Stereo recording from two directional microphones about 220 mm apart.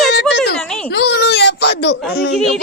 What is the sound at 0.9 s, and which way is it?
A child's voice, 50° left (ahead or behind).